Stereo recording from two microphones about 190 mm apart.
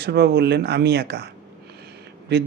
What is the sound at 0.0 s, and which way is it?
Speech, 60° right (ahead or behind).